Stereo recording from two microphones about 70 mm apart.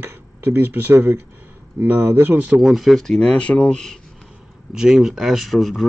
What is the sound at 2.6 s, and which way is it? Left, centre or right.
Speech, centre.